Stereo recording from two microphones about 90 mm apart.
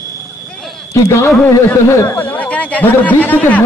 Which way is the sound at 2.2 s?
20° left (ahead or behind).